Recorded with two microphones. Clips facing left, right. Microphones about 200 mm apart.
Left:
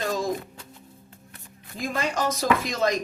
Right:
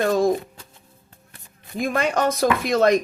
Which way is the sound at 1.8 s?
60° right (ahead or behind).